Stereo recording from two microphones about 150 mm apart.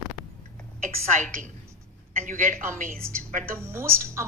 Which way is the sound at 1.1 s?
60° right (ahead or behind).